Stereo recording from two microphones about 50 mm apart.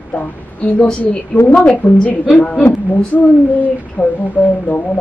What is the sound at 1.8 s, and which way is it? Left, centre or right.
Speech, left.